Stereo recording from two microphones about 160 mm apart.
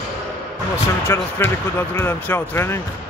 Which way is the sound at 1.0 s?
15° left (ahead or behind).